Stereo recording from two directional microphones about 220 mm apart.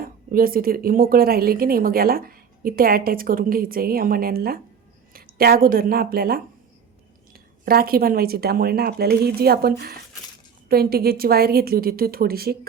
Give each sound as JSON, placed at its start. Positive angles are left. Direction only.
{"t": 0.0, "sound": "a woman's voice", "side_deg": -40}